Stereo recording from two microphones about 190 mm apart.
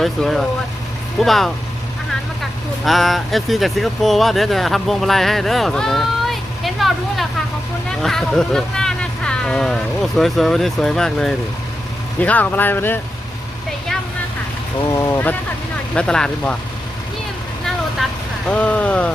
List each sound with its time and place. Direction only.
0.0 s speech: centre (ahead or behind)
14.8 s speech: 20° left (ahead or behind)
18.0 s vehicle: centre (ahead or behind)
18.4 s speech: 5° left (ahead or behind)